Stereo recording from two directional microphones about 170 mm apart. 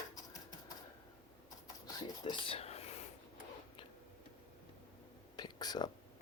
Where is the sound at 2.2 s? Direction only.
30° left (ahead or behind).